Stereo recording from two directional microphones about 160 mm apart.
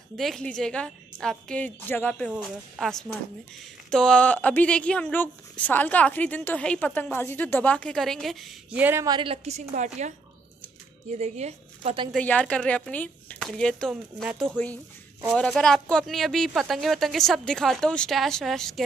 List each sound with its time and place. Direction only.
0.2 s a woman's voice: 5° left (ahead or behind)
9.0 s a woman's voice: 30° right (ahead or behind)
12.1 s speech: 10° left (ahead or behind)